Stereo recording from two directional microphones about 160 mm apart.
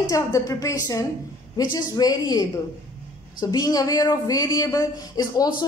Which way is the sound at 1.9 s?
25° left (ahead or behind).